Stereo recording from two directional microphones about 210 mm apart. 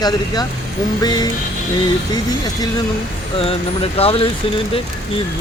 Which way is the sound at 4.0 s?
25° left (ahead or behind).